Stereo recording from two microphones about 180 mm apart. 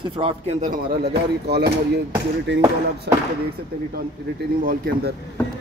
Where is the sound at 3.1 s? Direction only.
65° right (ahead or behind).